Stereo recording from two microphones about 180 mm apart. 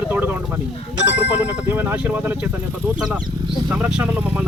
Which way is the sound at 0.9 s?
80° left.